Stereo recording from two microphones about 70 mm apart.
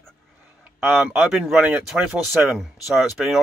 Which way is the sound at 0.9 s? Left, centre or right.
Centre.